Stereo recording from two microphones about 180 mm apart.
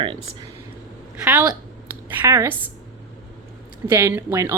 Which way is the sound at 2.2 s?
15° right (ahead or behind).